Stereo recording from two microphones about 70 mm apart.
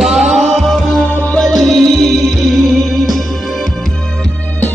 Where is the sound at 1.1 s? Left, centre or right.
Left.